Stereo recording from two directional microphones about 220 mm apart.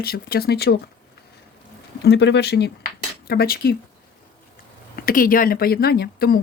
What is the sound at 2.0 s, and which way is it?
Speech, 50° left (ahead or behind).